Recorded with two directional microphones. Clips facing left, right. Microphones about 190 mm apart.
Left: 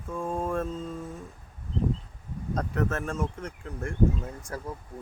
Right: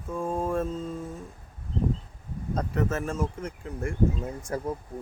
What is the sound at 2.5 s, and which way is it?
Mantra, centre (ahead or behind).